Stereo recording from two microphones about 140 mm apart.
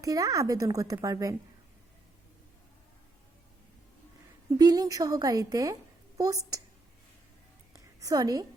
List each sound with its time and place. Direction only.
0.0 s speech: 25° right (ahead or behind)
4.5 s speech: 25° right (ahead or behind)
8.0 s speech: 25° right (ahead or behind)